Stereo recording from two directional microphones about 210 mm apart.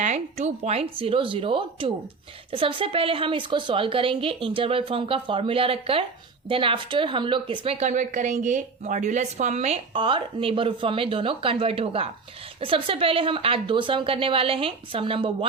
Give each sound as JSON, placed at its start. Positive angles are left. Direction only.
{"t": 0.0, "sound": "a woman's voice", "side_deg": -35}